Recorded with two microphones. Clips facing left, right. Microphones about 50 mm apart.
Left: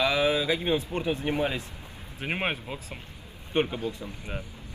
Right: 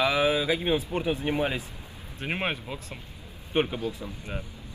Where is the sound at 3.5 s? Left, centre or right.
Centre.